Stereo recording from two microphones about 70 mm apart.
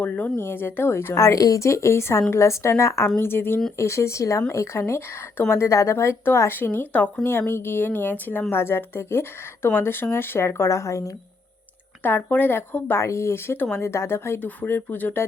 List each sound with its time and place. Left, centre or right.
0.3 s a woman's voice: left
1.1 s speech: left
3.2 s a woman's voice: left
6.6 s speech: left
7.3 s a woman's voice: left
12.0 s a woman's voice: left
14.3 s speech: left